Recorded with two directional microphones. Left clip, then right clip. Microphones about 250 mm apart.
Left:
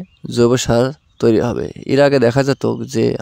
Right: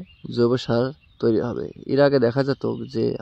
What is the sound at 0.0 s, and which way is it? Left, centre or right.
Speech, left.